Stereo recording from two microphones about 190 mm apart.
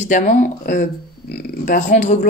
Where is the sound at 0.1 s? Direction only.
40° left (ahead or behind).